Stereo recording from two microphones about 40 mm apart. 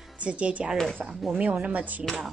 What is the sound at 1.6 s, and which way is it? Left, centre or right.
Speech, right.